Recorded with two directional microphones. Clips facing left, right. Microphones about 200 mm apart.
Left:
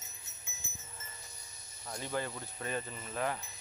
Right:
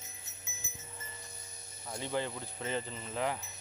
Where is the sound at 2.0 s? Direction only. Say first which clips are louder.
Right 2 dB; 20° right (ahead or behind).